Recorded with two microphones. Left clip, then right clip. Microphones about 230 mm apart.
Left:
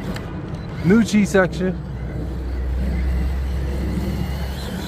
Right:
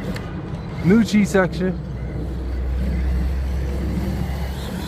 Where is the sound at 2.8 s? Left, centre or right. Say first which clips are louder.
Left 1 dB; centre.